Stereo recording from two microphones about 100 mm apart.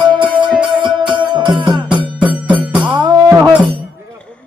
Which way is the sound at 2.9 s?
45° right (ahead or behind).